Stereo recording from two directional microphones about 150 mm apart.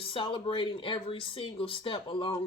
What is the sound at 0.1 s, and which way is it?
Speech, 35° left (ahead or behind).